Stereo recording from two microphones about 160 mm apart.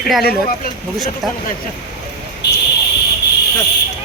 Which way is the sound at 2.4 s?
90° left.